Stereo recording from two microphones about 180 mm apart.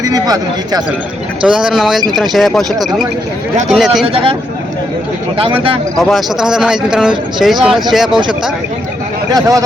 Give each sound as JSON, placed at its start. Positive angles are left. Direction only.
{"t": 0.0, "sound": "speech", "side_deg": -20}
{"t": 1.5, "sound": "speech", "side_deg": -5}
{"t": 2.7, "sound": "speech", "side_deg": -20}
{"t": 3.7, "sound": "speech", "side_deg": 0}
{"t": 4.0, "sound": "speech", "side_deg": -30}
{"t": 5.4, "sound": "speech", "side_deg": -30}
{"t": 6.0, "sound": "speech", "side_deg": 0}
{"t": 9.3, "sound": "speech", "side_deg": -20}